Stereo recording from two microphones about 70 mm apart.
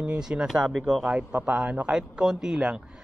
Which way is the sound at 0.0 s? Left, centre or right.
Centre.